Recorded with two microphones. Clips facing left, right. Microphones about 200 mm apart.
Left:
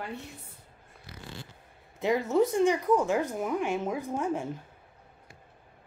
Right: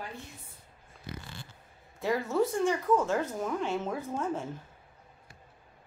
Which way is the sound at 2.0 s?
20° left (ahead or behind).